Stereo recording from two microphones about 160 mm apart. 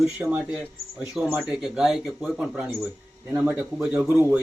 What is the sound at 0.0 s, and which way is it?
Speech, 5° right (ahead or behind).